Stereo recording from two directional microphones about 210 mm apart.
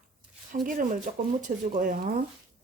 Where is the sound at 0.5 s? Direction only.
40° right (ahead or behind).